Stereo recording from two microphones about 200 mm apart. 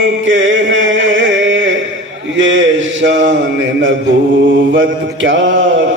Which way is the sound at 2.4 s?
70° right (ahead or behind).